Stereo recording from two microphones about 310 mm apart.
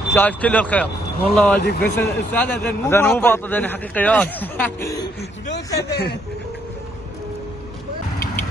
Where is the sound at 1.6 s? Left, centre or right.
Left.